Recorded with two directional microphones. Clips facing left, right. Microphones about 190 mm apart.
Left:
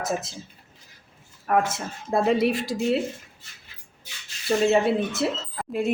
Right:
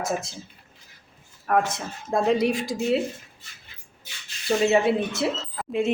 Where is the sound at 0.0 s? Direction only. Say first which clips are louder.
Even; centre (ahead or behind).